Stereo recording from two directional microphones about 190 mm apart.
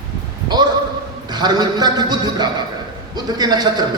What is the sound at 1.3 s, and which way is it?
A man's voice, 20° right (ahead or behind).